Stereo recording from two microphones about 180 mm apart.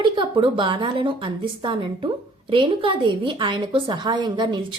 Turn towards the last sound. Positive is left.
turn(degrees=-25)  # may be behind; listen again after turning